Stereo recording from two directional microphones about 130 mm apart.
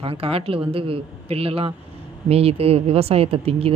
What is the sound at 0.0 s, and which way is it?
Speech, 45° right (ahead or behind).